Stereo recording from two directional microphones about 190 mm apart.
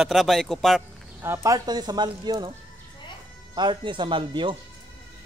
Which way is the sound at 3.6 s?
25° right (ahead or behind).